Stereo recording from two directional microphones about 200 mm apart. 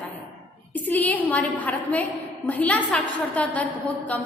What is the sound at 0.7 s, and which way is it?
A woman's voice, 10° left (ahead or behind).